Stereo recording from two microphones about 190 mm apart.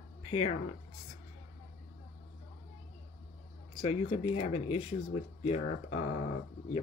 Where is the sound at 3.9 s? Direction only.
30° left (ahead or behind).